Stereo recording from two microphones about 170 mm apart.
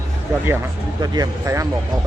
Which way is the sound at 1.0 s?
20° right (ahead or behind).